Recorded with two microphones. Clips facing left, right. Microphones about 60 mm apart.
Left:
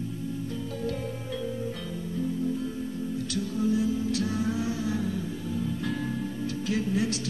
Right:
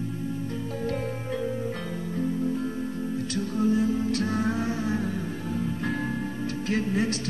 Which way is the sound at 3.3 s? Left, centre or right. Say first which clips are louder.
Right 2 dB; right.